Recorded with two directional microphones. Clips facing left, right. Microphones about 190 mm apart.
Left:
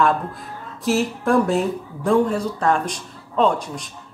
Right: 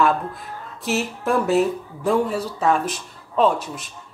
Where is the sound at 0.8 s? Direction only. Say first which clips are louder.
Left 3 dB; centre (ahead or behind).